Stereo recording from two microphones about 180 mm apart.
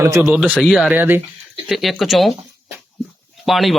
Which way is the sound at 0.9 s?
10° right (ahead or behind).